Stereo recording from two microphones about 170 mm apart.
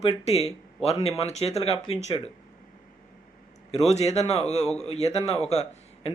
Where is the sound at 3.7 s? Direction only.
40° left (ahead or behind).